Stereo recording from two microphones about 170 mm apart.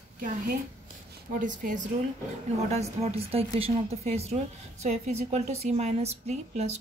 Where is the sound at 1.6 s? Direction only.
55° right (ahead or behind).